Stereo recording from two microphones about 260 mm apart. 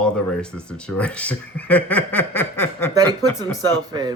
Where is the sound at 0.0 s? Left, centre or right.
Centre.